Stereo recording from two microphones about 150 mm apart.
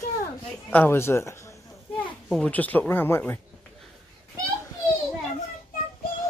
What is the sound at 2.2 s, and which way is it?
Speech, 5° left (ahead or behind).